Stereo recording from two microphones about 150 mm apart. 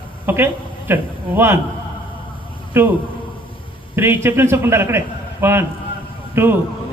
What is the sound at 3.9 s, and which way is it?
A man's voice, 15° right (ahead or behind).